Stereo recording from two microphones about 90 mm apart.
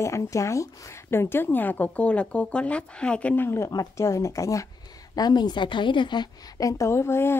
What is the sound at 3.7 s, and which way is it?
Speech, 35° left (ahead or behind).